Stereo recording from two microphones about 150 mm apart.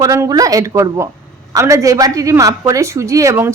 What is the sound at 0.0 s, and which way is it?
A woman's voice, 25° right (ahead or behind).